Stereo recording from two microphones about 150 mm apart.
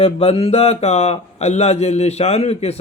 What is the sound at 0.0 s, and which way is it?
Speech, 40° left (ahead or behind).